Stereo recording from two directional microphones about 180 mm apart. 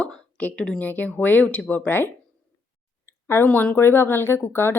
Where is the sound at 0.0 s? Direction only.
5° left (ahead or behind).